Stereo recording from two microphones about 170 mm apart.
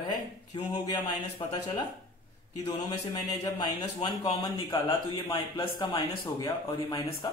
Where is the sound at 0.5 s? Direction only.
25° left (ahead or behind).